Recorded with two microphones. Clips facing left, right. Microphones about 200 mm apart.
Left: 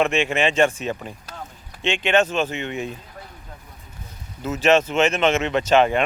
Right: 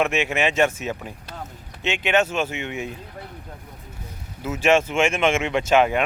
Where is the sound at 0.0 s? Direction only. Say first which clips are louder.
Left 2 dB; 5° right (ahead or behind).